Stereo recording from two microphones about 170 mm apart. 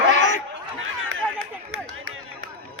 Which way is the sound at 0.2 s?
45° left (ahead or behind).